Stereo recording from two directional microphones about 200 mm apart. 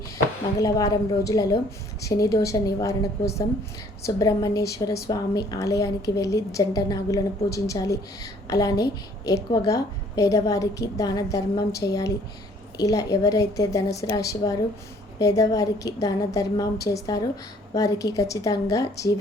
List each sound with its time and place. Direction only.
0.6 s a woman's voice: 20° left (ahead or behind)